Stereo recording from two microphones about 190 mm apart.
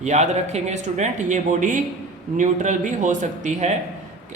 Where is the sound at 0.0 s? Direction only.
35° right (ahead or behind).